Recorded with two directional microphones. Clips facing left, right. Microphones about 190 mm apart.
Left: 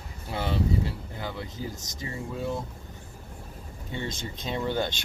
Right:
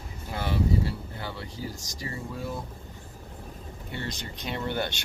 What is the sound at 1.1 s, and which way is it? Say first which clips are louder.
Speech: left 2 dB; 15° left (ahead or behind).